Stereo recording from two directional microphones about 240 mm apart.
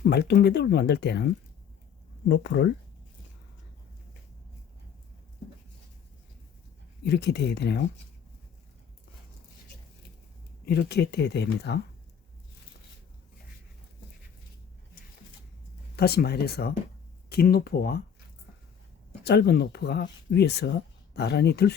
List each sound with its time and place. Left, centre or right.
0.0 s speech: left
7.0 s speech: left
10.7 s speech: left
16.0 s speech: left
19.2 s speech: left